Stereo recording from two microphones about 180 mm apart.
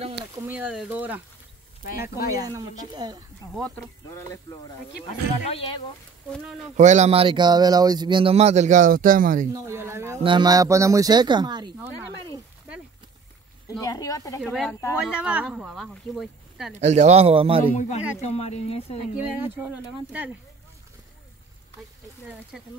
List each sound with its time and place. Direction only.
0.5 s speech: 10° right (ahead or behind)
1.9 s speech: 55° left (ahead or behind)
2.4 s speech: 20° right (ahead or behind)
3.5 s speech: centre (ahead or behind)
4.1 s speech: 20° left (ahead or behind)
5.5 s speech: 30° left (ahead or behind)
6.8 s speech: 40° right (ahead or behind)
9.5 s speech: 15° right (ahead or behind)
13.7 s speech: 20° left (ahead or behind)
14.4 s speech: 5° left (ahead or behind)
15.0 s speech: 5° right (ahead or behind)
16.8 s speech: 40° right (ahead or behind)
17.7 s speech: 40° left (ahead or behind)
19.3 s speech: 10° right (ahead or behind)